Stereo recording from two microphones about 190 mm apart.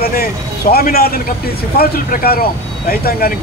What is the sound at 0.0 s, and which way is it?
A man's voice, 50° left (ahead or behind).